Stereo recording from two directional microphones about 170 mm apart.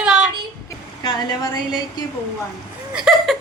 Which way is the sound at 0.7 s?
25° left (ahead or behind).